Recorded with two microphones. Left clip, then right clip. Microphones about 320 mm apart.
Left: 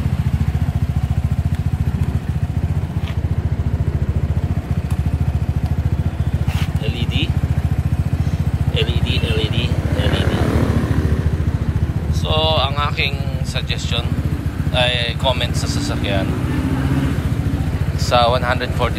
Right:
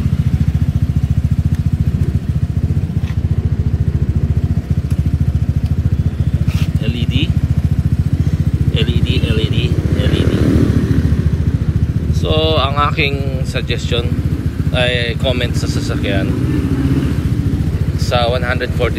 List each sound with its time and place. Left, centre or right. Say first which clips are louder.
9.3 s vehicle: right 2 dB; centre
12.4 s a sound: right 3 dB; centre
14.8 s speech: right 2 dB; centre
18.1 s speech: left 1 dB; centre